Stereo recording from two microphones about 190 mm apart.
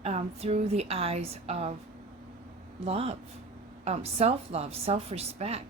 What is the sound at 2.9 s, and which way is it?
A woman's voice, 30° right (ahead or behind).